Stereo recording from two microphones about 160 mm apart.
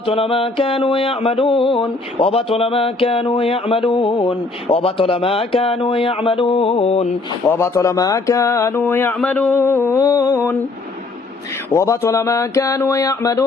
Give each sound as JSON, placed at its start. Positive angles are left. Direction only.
{"t": 0.0, "sound": "mantra", "side_deg": 35}
{"t": 7.4, "sound": "speech", "side_deg": 15}
{"t": 11.7, "sound": "music", "side_deg": 20}